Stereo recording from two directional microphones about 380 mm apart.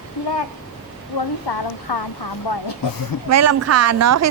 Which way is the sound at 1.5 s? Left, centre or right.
Left.